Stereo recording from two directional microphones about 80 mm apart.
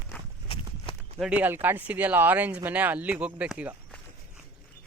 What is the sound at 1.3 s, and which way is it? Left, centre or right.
Speech, centre.